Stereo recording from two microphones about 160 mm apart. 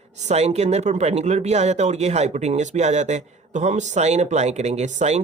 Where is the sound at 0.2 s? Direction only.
45° right (ahead or behind).